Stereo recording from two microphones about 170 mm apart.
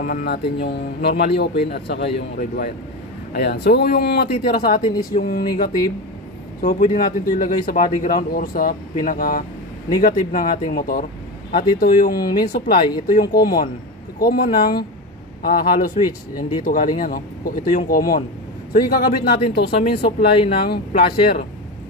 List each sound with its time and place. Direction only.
0.0 s speech: 60° left (ahead or behind)
6.6 s speech: 50° left (ahead or behind); by 21.4 s 65° left (ahead or behind)